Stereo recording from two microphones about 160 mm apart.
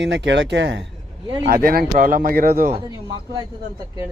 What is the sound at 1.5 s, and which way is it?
A man's voice, 70° right (ahead or behind).